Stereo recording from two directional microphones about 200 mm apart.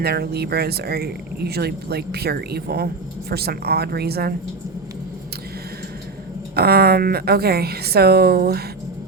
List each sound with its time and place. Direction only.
0.0 s speech: 50° right (ahead or behind)
6.6 s speech: 50° right (ahead or behind)